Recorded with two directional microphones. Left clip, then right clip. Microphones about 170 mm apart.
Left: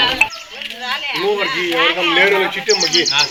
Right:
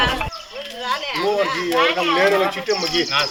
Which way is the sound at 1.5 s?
50° right (ahead or behind).